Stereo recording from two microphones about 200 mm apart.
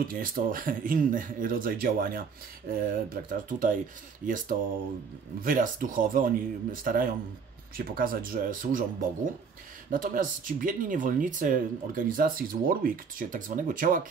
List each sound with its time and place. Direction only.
0.1 s speech: 45° right (ahead or behind)
5.4 s speech: 45° right (ahead or behind)
9.8 s speech: 45° right (ahead or behind)